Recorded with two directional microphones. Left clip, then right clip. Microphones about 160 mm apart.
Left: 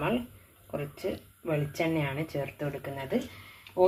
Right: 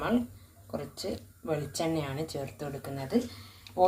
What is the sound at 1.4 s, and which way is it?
Speech, 15° left (ahead or behind).